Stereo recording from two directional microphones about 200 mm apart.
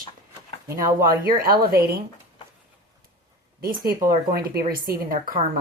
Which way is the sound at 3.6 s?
45° right (ahead or behind).